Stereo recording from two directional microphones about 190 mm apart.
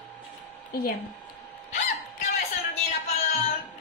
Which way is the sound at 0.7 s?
50° left (ahead or behind).